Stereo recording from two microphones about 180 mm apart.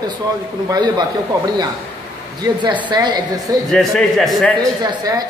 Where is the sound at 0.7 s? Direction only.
20° right (ahead or behind).